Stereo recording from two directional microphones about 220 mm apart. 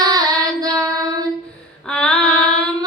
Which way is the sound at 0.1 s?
15° right (ahead or behind).